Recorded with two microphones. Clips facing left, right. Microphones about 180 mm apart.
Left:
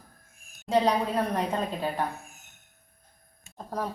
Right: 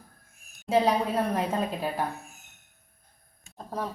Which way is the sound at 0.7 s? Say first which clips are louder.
Even; centre (ahead or behind).